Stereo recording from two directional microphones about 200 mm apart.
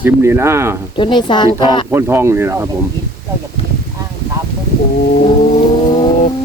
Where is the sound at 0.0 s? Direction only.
10° right (ahead or behind).